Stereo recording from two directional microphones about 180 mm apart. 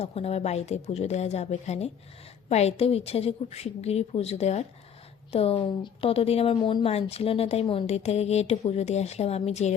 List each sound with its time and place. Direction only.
0.0 s a woman's voice: 35° left (ahead or behind)